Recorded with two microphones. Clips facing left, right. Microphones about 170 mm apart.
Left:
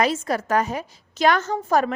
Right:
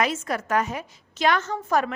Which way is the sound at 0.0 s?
35° left (ahead or behind).